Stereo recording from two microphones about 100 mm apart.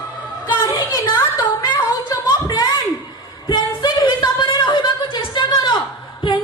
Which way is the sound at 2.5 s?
40° left (ahead or behind).